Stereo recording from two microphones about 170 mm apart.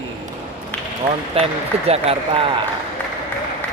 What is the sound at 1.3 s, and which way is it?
Speech, 35° right (ahead or behind).